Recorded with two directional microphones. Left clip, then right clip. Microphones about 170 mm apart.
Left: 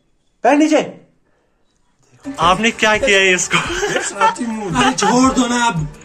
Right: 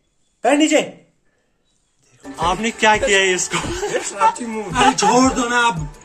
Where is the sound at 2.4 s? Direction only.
10° right (ahead or behind).